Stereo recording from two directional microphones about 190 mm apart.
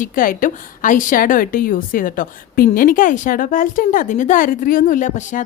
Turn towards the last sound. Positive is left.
turn(degrees=40)  # may be behind; listen again after turning